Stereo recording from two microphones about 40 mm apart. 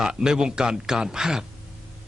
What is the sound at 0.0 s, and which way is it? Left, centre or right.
Speech, centre.